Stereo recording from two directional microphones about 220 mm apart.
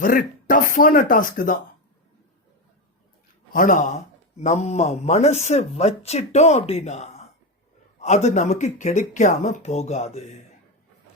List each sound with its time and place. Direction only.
0.0 s speech: 40° left (ahead or behind)
3.5 s speech: 35° left (ahead or behind)